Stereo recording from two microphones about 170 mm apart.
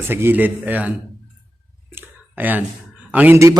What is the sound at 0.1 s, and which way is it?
Speech, 15° right (ahead or behind).